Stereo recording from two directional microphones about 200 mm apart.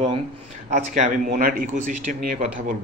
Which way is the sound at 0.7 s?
40° right (ahead or behind).